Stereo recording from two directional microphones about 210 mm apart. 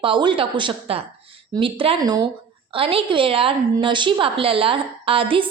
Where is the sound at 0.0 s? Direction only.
25° right (ahead or behind).